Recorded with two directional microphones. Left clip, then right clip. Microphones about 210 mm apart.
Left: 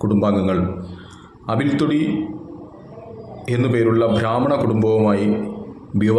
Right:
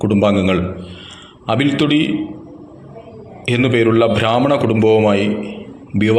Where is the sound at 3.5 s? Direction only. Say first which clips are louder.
Right 4 dB; 15° right (ahead or behind).